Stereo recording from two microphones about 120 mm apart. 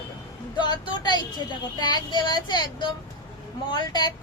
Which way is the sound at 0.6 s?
35° left (ahead or behind).